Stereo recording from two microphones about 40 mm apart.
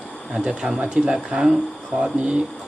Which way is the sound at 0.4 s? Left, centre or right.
Centre.